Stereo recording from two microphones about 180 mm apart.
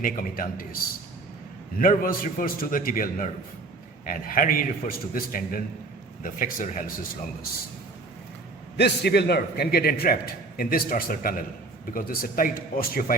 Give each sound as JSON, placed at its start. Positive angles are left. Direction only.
{"t": 0.0, "sound": "a man's voice", "side_deg": 50}
{"t": 1.8, "sound": "a man's voice", "side_deg": 50}
{"t": 8.8, "sound": "a man's voice", "side_deg": 65}